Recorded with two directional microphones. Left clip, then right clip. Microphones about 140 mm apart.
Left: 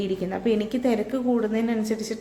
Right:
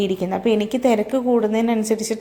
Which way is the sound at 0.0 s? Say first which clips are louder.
Right 6 dB; 35° right (ahead or behind).